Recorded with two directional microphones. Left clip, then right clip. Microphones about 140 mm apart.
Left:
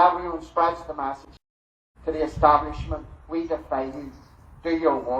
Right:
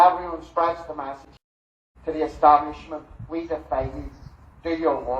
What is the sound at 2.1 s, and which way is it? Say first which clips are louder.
Speech: right 2 dB; 60° left (ahead or behind).